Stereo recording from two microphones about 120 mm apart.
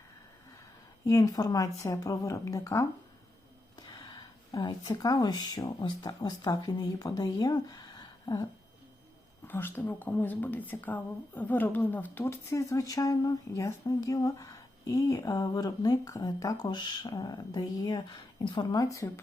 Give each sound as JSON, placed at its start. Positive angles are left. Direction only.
{"t": 1.0, "sound": "speech", "side_deg": 30}
{"t": 3.8, "sound": "speech", "side_deg": 35}
{"t": 9.5, "sound": "speech", "side_deg": 15}